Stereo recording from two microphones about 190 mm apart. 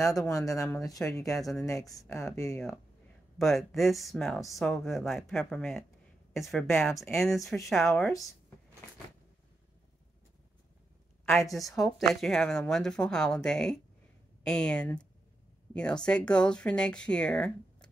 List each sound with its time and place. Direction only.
0.0 s speech: 15° left (ahead or behind); by 1.7 s centre (ahead or behind)
1.7 s speech: 15° left (ahead or behind)
3.3 s speech: centre (ahead or behind)
6.7 s speech: 10° left (ahead or behind)
7.2 s speech: centre (ahead or behind)
11.5 s speech: centre (ahead or behind)